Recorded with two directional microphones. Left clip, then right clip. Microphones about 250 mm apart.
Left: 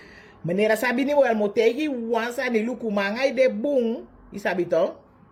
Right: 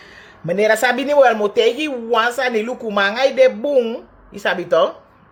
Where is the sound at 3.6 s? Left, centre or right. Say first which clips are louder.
Right 6 dB; centre.